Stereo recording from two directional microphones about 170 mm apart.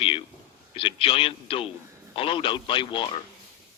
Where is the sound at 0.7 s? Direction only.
35° left (ahead or behind).